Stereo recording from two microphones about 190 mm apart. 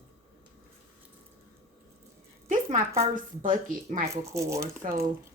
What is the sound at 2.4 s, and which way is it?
Rattle, 40° right (ahead or behind).